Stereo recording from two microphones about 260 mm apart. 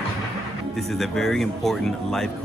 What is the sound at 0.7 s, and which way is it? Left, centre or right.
Speech, centre.